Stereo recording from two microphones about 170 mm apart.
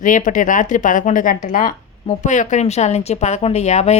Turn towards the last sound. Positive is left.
turn(degrees=40)  # may be behind; listen again after turning